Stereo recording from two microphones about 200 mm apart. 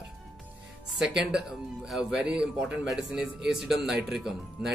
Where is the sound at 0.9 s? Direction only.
Centre (ahead or behind).